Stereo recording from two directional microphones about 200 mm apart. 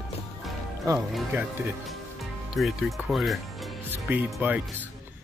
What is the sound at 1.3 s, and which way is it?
Speech, 5° right (ahead or behind).